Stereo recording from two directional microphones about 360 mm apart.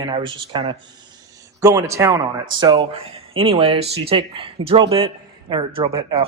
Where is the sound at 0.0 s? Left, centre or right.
Centre.